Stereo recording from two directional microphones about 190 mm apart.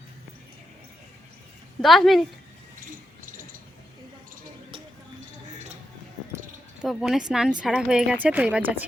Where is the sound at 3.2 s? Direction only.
45° right (ahead or behind).